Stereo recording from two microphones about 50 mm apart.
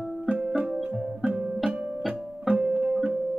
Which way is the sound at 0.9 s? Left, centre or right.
Right.